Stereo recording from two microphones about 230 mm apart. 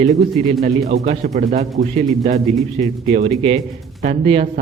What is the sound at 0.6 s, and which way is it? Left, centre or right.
A man's voice, right.